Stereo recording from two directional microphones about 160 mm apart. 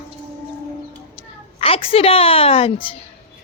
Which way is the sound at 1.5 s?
35° left (ahead or behind).